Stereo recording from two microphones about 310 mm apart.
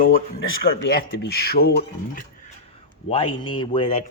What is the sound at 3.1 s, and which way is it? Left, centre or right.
Speech, centre.